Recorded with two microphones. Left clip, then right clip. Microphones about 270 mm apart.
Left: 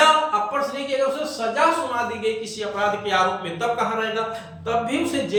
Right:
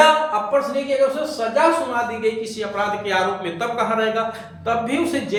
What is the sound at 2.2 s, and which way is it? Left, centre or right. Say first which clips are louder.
A man's voice: right 3 dB; centre.